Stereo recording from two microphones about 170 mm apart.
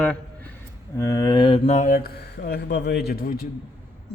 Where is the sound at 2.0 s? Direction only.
65° left (ahead or behind).